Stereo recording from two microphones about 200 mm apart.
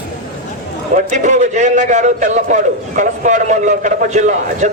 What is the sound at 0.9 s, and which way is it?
A man's voice, 35° right (ahead or behind).